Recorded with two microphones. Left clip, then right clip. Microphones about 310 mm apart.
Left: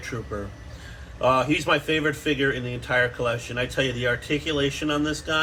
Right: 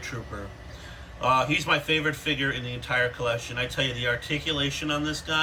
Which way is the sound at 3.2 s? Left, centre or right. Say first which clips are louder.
Left 1 dB; right.